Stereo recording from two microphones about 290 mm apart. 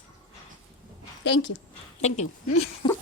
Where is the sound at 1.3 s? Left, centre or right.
Left.